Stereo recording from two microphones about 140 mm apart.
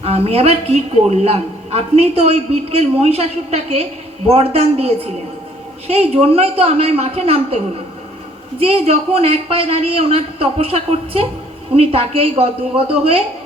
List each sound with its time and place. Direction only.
0.0 s a man's voice: 45° right (ahead or behind)